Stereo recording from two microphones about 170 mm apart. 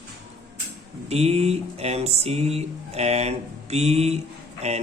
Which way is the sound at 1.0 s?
35° right (ahead or behind).